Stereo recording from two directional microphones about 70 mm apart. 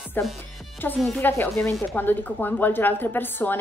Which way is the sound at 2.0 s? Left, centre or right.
Left.